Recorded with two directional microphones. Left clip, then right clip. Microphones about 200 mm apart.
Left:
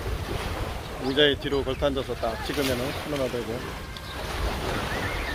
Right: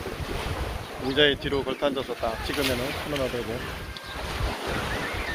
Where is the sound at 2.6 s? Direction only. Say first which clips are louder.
Even; 45° left (ahead or behind).